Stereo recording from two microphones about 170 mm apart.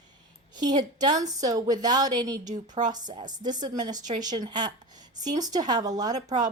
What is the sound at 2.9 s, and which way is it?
Speech, 25° right (ahead or behind).